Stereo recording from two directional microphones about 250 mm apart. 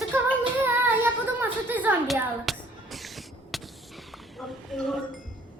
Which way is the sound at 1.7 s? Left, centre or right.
Centre.